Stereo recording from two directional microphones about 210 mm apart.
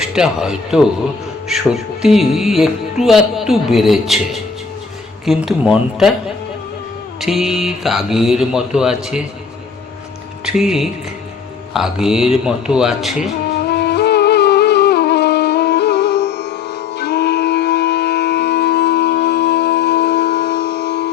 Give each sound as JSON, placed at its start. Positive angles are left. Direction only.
{"t": 0.0, "sound": "music", "side_deg": -5}
{"t": 7.2, "sound": "music", "side_deg": 0}
{"t": 10.4, "sound": "speech", "side_deg": 0}
{"t": 11.7, "sound": "music", "side_deg": 0}
{"t": 13.7, "sound": "shofar", "side_deg": 50}